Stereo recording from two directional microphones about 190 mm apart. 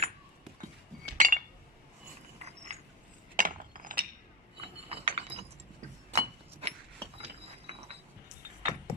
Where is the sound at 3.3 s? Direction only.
45° right (ahead or behind).